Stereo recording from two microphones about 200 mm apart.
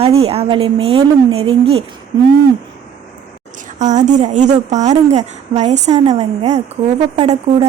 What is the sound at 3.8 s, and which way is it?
A woman's voice, 35° right (ahead or behind).